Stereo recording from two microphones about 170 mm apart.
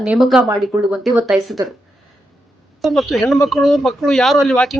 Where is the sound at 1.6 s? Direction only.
15° right (ahead or behind).